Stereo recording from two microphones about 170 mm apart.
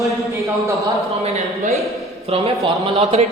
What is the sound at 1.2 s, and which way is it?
A man's voice, 40° right (ahead or behind).